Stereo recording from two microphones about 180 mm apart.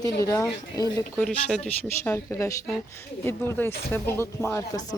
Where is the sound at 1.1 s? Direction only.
5° left (ahead or behind).